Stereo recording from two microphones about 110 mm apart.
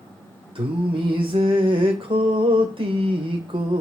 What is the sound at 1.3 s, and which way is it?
Mantra, 50° right (ahead or behind).